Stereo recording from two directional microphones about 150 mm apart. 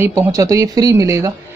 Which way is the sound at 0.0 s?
20° right (ahead or behind).